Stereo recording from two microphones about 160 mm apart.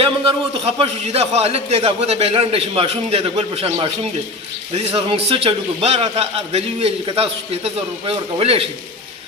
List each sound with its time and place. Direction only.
0.0 s a man's voice: 35° right (ahead or behind)